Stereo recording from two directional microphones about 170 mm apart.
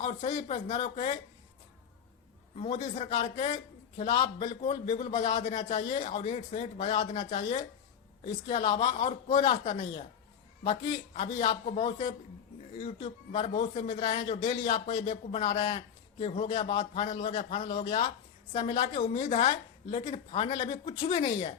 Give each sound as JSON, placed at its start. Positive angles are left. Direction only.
{"t": 0.0, "sound": "a man's voice", "side_deg": 40}
{"t": 2.6, "sound": "a man's voice", "side_deg": 35}
{"t": 5.4, "sound": "speech", "side_deg": 45}
{"t": 5.6, "sound": "a man's voice", "side_deg": 35}
{"t": 7.1, "sound": "a man's voice", "side_deg": 40}
{"t": 18.5, "sound": "a woman's voice", "side_deg": 30}